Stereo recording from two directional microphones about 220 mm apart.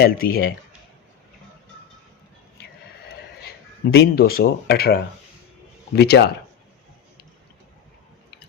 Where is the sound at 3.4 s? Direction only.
45° left (ahead or behind).